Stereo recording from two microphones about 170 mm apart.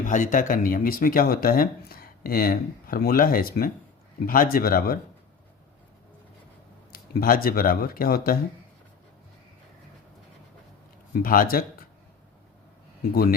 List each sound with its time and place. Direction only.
0.0 s speech: 50° left (ahead or behind)
6.9 s speech: 60° left (ahead or behind)
11.2 s speech: 60° left (ahead or behind)
13.0 s speech: 65° left (ahead or behind)